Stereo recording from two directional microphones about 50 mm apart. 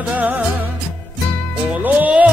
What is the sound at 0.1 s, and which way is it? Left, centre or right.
Music, right.